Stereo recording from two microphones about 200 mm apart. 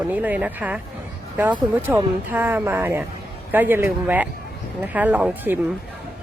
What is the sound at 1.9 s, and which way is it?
Speech, 10° right (ahead or behind).